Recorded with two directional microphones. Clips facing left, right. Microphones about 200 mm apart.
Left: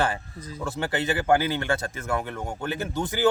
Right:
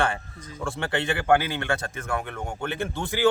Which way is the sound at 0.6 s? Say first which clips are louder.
Even; 5° left (ahead or behind).